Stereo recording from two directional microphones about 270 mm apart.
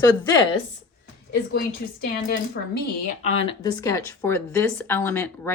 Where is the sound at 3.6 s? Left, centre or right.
Centre.